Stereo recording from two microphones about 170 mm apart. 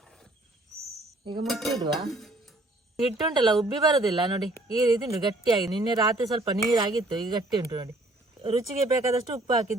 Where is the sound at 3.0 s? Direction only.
25° right (ahead or behind).